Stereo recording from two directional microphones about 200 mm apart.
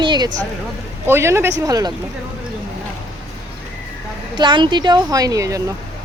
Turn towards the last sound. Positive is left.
turn(degrees=-15)  # may be behind; listen again after turning